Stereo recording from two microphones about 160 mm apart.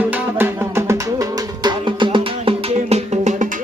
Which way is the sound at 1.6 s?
30° right (ahead or behind).